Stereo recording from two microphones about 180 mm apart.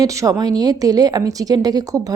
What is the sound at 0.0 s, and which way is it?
Speech, 20° right (ahead or behind).